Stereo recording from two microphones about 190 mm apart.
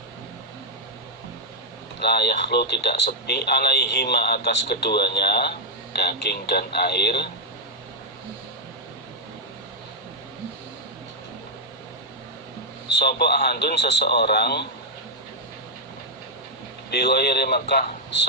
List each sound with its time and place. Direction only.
2.0 s speech: 60° left (ahead or behind)
13.0 s speech: 60° left (ahead or behind)
16.9 s speech: 60° left (ahead or behind)